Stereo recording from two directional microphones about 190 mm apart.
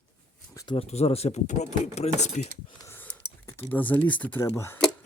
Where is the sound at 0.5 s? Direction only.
20° left (ahead or behind).